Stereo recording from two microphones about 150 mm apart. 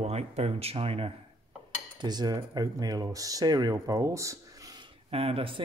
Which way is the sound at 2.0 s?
25° right (ahead or behind).